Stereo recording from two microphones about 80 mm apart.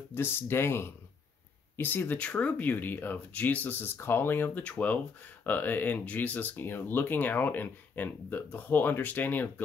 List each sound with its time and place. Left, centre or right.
0.1 s speech: left